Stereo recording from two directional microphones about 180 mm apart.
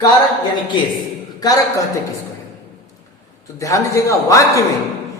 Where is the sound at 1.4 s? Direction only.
20° left (ahead or behind).